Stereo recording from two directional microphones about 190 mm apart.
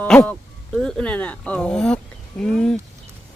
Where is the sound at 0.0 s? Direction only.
10° left (ahead or behind).